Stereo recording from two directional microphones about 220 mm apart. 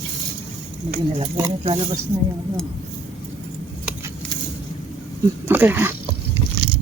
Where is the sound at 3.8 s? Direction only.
15° right (ahead or behind).